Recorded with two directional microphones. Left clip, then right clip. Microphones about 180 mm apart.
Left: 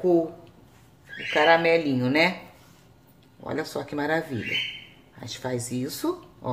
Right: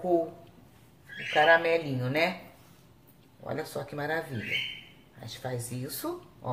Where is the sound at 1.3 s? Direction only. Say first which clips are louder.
Left 3 dB; 35° left (ahead or behind).